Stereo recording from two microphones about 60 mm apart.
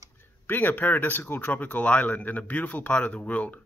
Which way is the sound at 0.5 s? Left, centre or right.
Left.